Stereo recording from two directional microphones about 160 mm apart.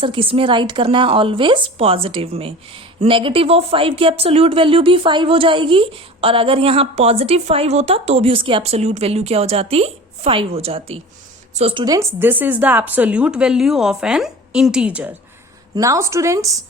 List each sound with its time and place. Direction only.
0.0 s speech: 35° right (ahead or behind)
11.9 s a woman's voice: 10° right (ahead or behind)
15.7 s a woman's voice: 20° right (ahead or behind)